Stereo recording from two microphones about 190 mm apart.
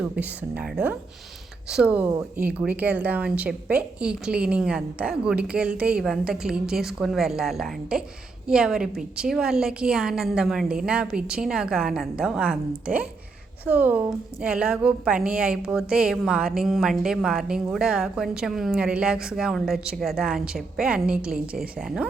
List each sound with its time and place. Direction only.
0.0 s a woman's voice: 5° right (ahead or behind)